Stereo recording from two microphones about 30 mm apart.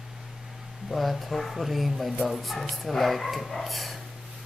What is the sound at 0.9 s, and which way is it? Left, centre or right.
Speech, centre.